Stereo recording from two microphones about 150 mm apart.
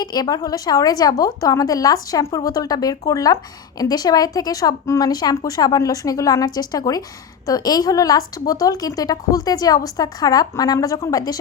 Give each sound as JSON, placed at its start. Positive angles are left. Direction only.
{"t": 0.0, "sound": "speech", "side_deg": 25}